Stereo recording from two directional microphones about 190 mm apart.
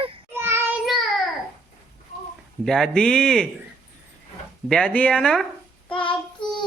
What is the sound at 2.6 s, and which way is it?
Speech, centre (ahead or behind).